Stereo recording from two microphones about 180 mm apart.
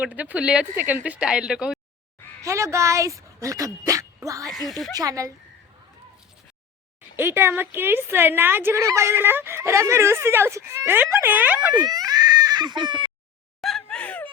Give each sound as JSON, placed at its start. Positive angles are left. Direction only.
{"t": 0.0, "sound": "a woman's voice", "side_deg": -10}
{"t": 2.4, "sound": "a woman's voice", "side_deg": -15}
{"t": 7.2, "sound": "a woman's voice", "side_deg": -15}
{"t": 11.9, "sound": "baby cry", "side_deg": -20}
{"t": 13.6, "sound": "a sound", "side_deg": 0}